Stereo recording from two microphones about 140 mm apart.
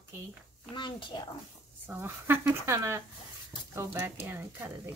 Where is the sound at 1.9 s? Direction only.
15° right (ahead or behind).